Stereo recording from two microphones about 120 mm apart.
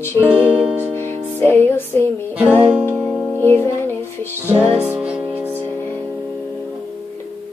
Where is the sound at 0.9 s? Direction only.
20° left (ahead or behind).